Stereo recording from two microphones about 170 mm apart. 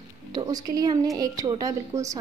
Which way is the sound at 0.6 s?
20° right (ahead or behind).